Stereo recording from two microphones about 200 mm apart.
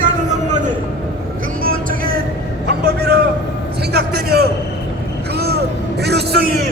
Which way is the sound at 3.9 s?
50° right (ahead or behind).